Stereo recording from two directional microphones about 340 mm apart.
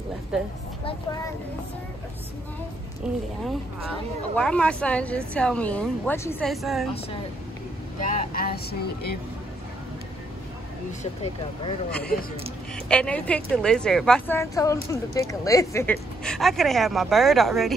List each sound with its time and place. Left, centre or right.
0.3 s a woman's voice: centre
3.1 s a woman's voice: centre
4.4 s a woman's voice: centre
8.0 s speech: right
8.4 s vehicle: left
12.7 s a woman's voice: centre